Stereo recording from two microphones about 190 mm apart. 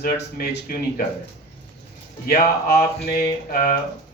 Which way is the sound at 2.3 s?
50° left (ahead or behind).